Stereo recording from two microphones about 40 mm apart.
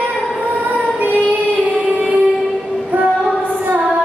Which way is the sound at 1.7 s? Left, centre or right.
Right.